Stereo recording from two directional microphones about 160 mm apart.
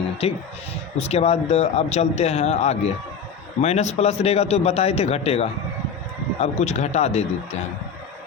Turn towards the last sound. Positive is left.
turn(degrees=45)  # may be behind; listen again after turning